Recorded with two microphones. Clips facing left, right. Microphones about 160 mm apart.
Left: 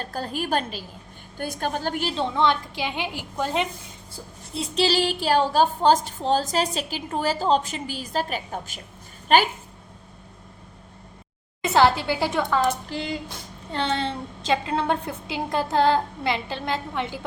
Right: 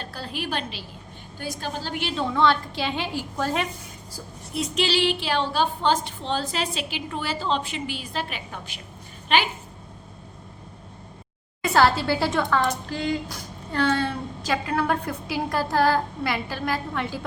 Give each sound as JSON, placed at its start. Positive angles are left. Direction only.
{"t": 0.0, "sound": "a woman's voice", "side_deg": 45}
{"t": 2.1, "sound": "a woman's voice", "side_deg": 20}
{"t": 11.6, "sound": "a woman's voice", "side_deg": 20}
{"t": 13.7, "sound": "a woman's voice", "side_deg": 25}